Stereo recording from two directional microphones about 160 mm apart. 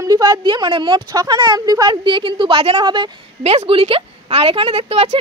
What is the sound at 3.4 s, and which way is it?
A woman's voice, 40° right (ahead or behind).